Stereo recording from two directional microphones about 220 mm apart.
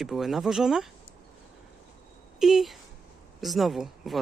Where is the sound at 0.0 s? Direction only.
Centre (ahead or behind).